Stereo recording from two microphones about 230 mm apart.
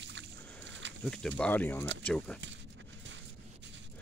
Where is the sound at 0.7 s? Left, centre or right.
Right.